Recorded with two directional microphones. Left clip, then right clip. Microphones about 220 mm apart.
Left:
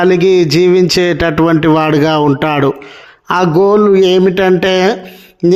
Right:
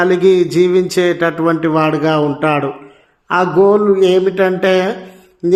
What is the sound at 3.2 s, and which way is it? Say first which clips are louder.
Speech: left 1 dB; 45° left (ahead or behind).